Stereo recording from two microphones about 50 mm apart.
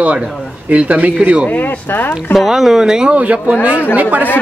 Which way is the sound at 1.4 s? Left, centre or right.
Left.